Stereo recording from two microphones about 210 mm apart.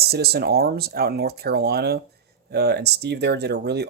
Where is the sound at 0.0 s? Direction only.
50° right (ahead or behind).